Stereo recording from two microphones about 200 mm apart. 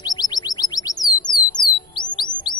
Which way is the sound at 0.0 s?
20° left (ahead or behind).